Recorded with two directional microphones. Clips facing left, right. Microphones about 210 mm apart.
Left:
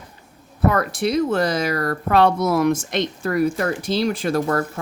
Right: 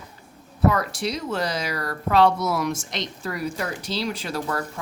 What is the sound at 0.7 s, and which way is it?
Speech, 55° left (ahead or behind).